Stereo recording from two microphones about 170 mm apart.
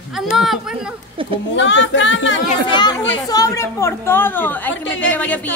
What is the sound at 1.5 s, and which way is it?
Speech, 90° left.